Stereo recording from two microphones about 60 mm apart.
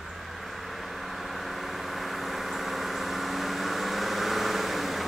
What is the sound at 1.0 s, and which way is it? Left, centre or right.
Vehicle, centre.